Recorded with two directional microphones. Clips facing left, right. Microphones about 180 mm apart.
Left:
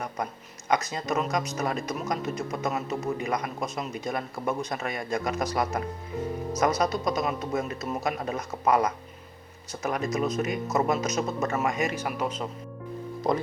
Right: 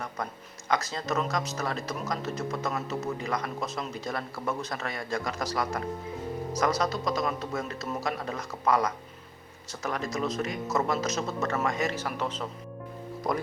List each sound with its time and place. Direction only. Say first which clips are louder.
0.7 s a man's voice: left 2 dB; 20° left (ahead or behind)